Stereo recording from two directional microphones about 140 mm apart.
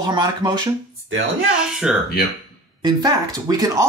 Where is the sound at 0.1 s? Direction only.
30° right (ahead or behind).